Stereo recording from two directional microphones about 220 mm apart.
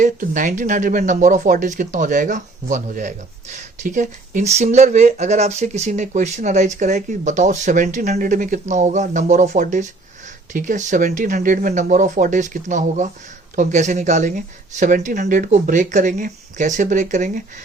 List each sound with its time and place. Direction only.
0.0 s speech: 35° right (ahead or behind)